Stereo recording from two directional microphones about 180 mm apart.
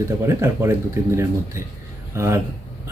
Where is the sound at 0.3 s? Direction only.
15° right (ahead or behind).